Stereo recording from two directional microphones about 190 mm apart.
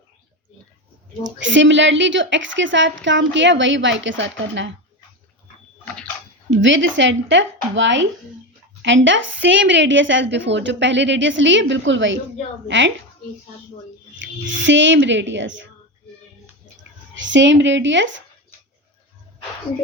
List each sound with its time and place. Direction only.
1.2 s a woman's voice: 75° right (ahead or behind)
6.6 s a woman's voice: 75° right (ahead or behind)
14.2 s a woman's voice: 75° right (ahead or behind)
17.2 s a woman's voice: 75° right (ahead or behind)